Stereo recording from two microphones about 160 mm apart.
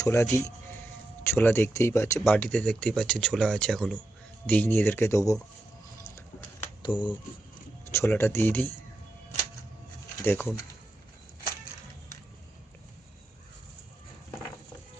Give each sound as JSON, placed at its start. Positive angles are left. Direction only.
{"t": 0.0, "sound": "music", "side_deg": 15}
{"t": 1.2, "sound": "speech", "side_deg": 15}
{"t": 6.8, "sound": "speech", "side_deg": 30}
{"t": 7.9, "sound": "speech", "side_deg": 15}
{"t": 10.2, "sound": "speech", "side_deg": 15}